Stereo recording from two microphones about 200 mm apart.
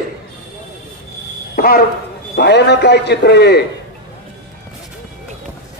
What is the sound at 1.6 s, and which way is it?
Speech, 45° left (ahead or behind).